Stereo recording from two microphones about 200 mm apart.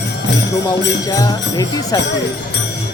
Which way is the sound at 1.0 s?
15° left (ahead or behind).